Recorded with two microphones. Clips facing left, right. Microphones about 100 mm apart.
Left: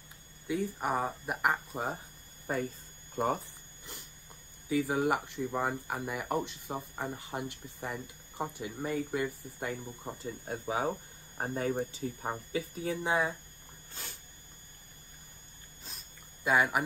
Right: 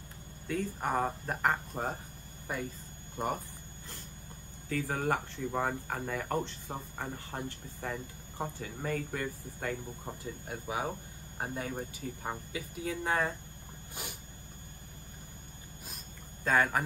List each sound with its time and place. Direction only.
0.5 s speech: 15° left (ahead or behind)
4.6 s speech: 15° left (ahead or behind)
10.9 s speech: 25° left (ahead or behind)
12.5 s speech: 40° left (ahead or behind)
12.9 s speech: 15° left (ahead or behind)
14.0 s a sound: 15° right (ahead or behind)
16.4 s speech: 15° left (ahead or behind)